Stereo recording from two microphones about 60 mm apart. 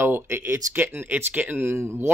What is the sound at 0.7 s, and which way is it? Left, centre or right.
Speech, right.